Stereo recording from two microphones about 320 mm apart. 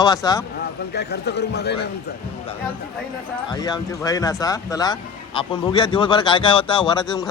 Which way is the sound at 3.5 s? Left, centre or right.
Centre.